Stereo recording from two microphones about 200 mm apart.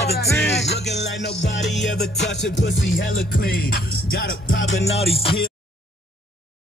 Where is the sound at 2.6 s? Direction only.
60° left (ahead or behind).